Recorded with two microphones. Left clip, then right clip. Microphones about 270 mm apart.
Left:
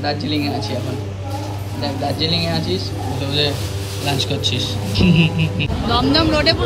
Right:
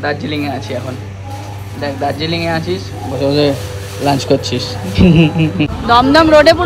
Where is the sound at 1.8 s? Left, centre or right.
Right.